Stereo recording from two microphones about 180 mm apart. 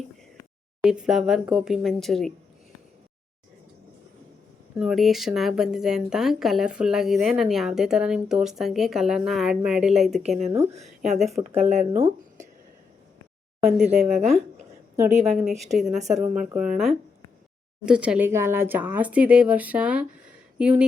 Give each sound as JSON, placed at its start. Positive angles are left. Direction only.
{"t": 0.8, "sound": "a woman's voice", "side_deg": -5}
{"t": 4.7, "sound": "a woman's voice", "side_deg": -5}
{"t": 11.6, "sound": "speech", "side_deg": -40}
{"t": 13.7, "sound": "a woman's voice", "side_deg": 0}